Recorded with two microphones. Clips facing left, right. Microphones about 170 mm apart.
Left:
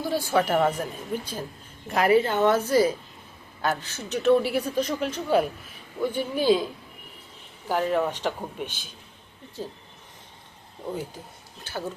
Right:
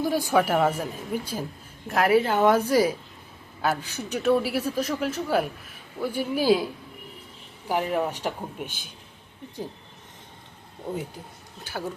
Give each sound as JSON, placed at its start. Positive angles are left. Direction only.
{"t": 0.0, "sound": "a man's voice", "side_deg": -15}
{"t": 7.7, "sound": "speech", "side_deg": -10}
{"t": 8.6, "sound": "a man's voice", "side_deg": -50}